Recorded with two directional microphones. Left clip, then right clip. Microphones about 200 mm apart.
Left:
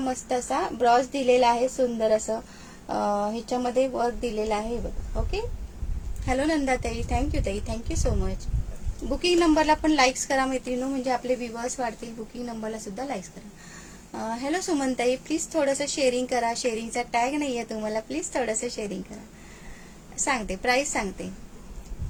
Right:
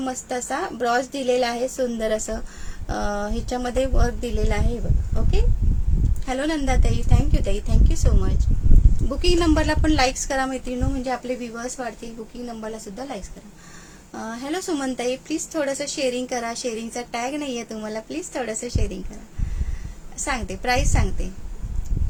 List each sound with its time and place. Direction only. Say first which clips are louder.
0.0 s a woman's voice: even; 15° right (ahead or behind)
6.2 s a woman's voice: even; 15° right (ahead or behind)
20.1 s a woman's voice: even; 10° right (ahead or behind)